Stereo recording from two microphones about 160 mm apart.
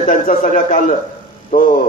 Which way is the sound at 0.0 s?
55° left (ahead or behind).